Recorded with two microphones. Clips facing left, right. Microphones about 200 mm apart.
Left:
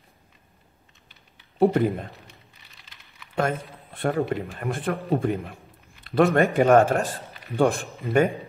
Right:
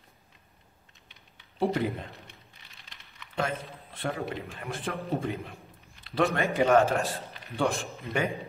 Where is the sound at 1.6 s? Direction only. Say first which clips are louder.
Left 8 dB; 50° left (ahead or behind).